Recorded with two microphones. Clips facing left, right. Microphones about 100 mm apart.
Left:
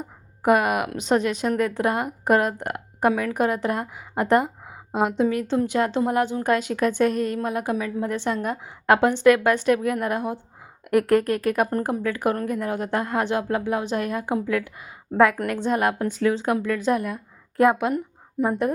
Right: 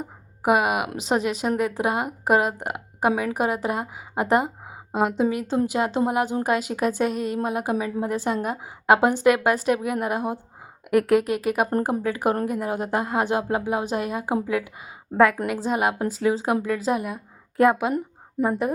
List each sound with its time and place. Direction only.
0.4 s a woman's voice: 10° right (ahead or behind)
3.1 s a woman's voice: 20° right (ahead or behind)
8.1 s a woman's voice: 10° right (ahead or behind)
10.8 s a woman's voice: centre (ahead or behind)
11.3 s a woman's voice: 10° right (ahead or behind)
15.4 s a woman's voice: centre (ahead or behind)
15.7 s a woman's voice: 15° right (ahead or behind)
17.6 s a woman's voice: centre (ahead or behind)